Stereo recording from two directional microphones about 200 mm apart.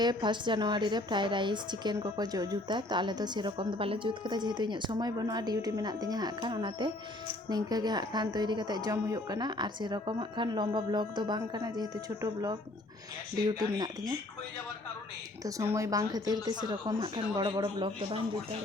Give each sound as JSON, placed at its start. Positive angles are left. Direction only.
{"t": 0.0, "sound": "a woman's voice", "side_deg": -20}
{"t": 13.6, "sound": "a woman's voice", "side_deg": -20}
{"t": 15.7, "sound": "a woman's voice", "side_deg": -15}